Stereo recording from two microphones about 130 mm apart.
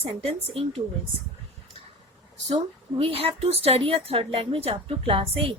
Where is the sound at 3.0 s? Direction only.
45° right (ahead or behind).